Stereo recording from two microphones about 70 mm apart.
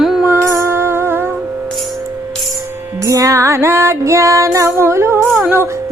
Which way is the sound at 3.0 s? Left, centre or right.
Right.